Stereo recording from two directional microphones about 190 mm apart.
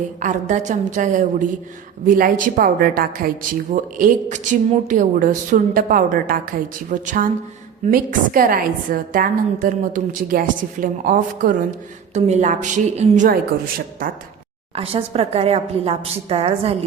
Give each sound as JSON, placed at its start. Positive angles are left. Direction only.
{"t": 0.2, "sound": "a woman's voice", "side_deg": -40}
{"t": 14.8, "sound": "a woman's voice", "side_deg": -30}